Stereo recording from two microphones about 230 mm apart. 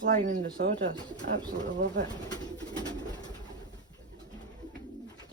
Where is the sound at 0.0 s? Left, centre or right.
Right.